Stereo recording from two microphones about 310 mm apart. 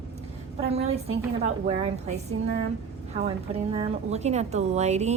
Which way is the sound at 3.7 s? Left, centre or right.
Centre.